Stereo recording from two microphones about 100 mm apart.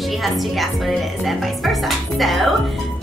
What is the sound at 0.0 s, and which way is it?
A woman's voice, centre (ahead or behind).